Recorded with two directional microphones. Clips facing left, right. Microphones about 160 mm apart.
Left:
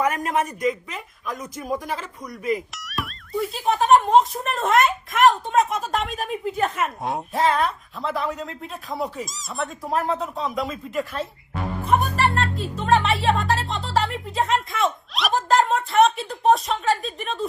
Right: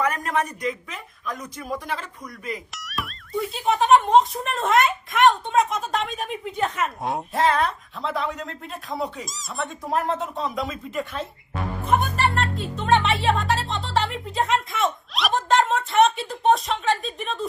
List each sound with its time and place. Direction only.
1.3 s speech: 20° left (ahead or behind)
2.7 s speech: centre (ahead or behind)